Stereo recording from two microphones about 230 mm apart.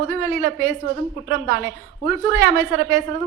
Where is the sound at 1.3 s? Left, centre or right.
Right.